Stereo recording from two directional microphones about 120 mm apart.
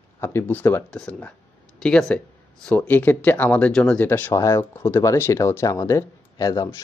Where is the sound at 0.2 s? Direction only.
20° left (ahead or behind).